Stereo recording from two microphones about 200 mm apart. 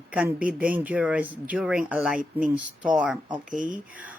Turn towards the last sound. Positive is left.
turn(degrees=-40)  # may be behind; listen again after turning